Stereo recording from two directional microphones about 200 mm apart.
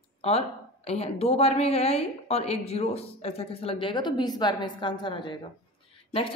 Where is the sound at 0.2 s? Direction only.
30° left (ahead or behind).